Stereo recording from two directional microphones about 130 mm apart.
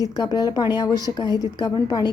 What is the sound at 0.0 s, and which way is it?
Speech, 30° left (ahead or behind).